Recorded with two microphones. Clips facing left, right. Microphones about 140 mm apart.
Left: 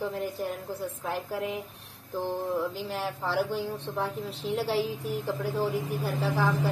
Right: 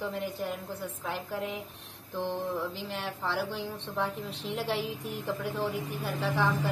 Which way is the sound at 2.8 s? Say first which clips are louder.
Left 3 dB; 40° left (ahead or behind).